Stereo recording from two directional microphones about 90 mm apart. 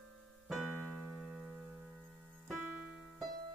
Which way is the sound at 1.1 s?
5° right (ahead or behind).